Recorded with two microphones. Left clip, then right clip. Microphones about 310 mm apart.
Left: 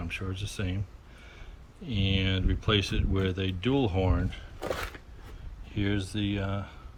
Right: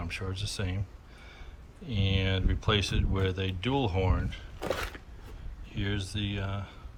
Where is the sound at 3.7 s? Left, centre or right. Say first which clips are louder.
Left 1 dB; centre.